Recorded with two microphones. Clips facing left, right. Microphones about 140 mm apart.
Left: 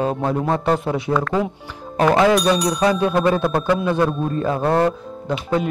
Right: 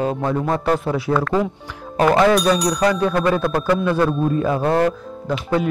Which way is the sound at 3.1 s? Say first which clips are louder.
Left 1 dB; 25° left (ahead or behind).